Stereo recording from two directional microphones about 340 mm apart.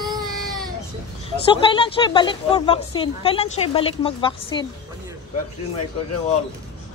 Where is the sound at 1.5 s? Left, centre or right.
Centre.